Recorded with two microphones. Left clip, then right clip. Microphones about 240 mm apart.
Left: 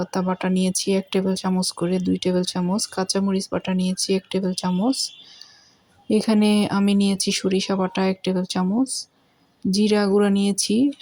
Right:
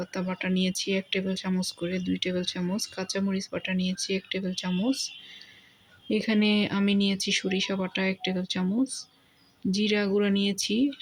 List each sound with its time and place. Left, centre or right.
0.1 s speech: left
6.1 s speech: left